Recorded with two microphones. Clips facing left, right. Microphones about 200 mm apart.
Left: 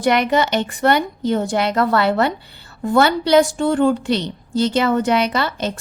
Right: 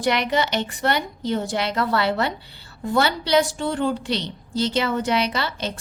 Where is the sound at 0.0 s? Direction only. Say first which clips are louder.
Left 5 dB; 50° left (ahead or behind).